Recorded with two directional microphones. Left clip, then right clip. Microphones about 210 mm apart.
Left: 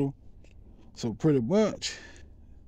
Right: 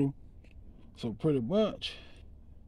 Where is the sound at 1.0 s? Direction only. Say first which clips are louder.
Left 5 dB; 35° left (ahead or behind).